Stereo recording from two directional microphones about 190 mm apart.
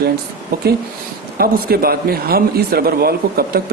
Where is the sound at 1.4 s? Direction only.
55° right (ahead or behind).